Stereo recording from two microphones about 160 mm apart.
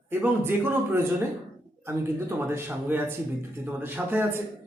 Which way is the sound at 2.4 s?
15° right (ahead or behind).